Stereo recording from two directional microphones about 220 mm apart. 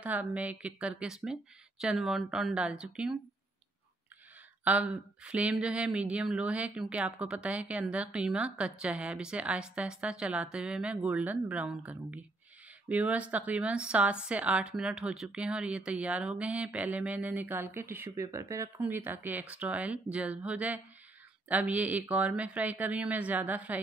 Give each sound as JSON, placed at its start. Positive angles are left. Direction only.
{"t": 0.0, "sound": "speech", "side_deg": -5}
{"t": 4.6, "sound": "a woman's voice", "side_deg": -5}